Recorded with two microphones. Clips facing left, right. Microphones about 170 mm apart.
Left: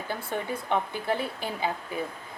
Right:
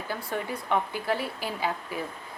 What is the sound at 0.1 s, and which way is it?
Speech, 25° left (ahead or behind).